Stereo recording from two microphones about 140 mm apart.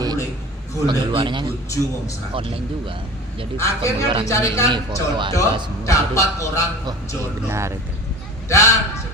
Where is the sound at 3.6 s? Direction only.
20° left (ahead or behind).